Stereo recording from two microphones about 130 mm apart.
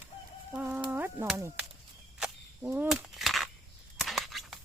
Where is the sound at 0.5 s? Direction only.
10° right (ahead or behind).